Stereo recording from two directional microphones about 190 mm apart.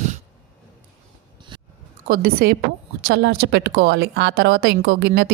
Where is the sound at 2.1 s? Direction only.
55° right (ahead or behind).